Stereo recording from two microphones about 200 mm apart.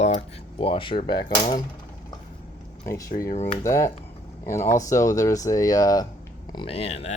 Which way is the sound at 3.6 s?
15° left (ahead or behind).